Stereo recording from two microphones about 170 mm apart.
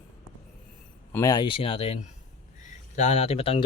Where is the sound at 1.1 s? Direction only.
20° left (ahead or behind).